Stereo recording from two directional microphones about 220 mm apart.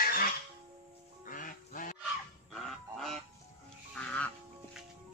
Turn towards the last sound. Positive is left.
turn(degrees=5)  # may be behind; listen again after turning